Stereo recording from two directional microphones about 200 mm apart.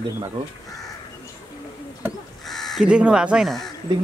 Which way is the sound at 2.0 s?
Centre (ahead or behind).